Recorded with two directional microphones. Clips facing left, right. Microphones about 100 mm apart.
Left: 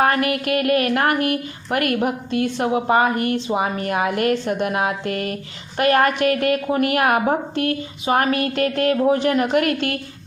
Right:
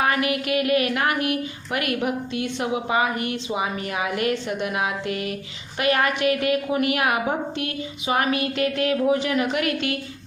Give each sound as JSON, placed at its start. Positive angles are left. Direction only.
{"t": 0.0, "sound": "a woman's voice", "side_deg": 50}